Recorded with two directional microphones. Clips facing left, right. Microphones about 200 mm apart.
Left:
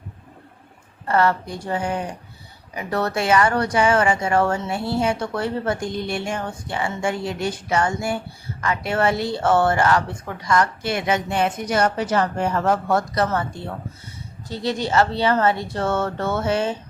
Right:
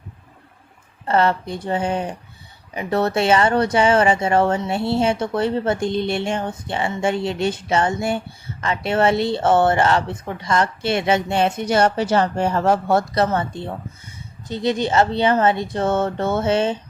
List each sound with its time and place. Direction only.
1.0 s speech: 25° right (ahead or behind)